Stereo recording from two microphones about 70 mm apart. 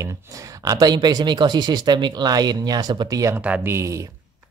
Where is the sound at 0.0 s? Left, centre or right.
Right.